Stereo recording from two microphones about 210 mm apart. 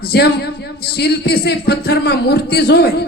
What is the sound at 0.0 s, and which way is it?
A man's voice, 50° left (ahead or behind).